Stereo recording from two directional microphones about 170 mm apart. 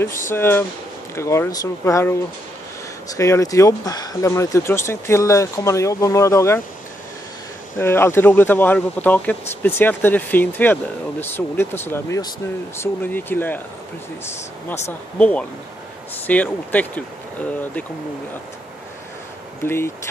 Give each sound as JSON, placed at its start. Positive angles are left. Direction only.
{"t": 0.3, "sound": "speech", "side_deg": 15}
{"t": 3.2, "sound": "speech", "side_deg": 20}
{"t": 7.7, "sound": "speech", "side_deg": 15}
{"t": 14.9, "sound": "speech", "side_deg": 10}
{"t": 19.6, "sound": "speech", "side_deg": 15}